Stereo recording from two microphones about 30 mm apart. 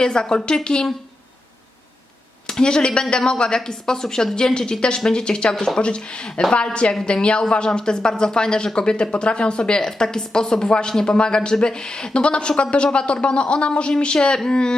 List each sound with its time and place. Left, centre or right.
0.0 s speech: left
2.5 s speech: left
3.7 s a woman's voice: centre
5.5 s speech: centre
5.8 s speech: left
7.7 s speech: left